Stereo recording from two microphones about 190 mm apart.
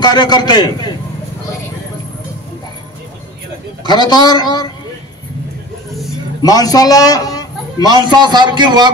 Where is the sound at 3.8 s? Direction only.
20° left (ahead or behind).